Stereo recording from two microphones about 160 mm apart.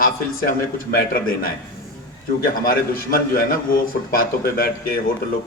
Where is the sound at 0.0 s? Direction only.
60° left (ahead or behind).